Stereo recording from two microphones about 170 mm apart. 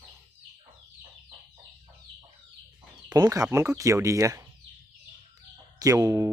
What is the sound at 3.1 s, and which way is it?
Speech, 20° right (ahead or behind).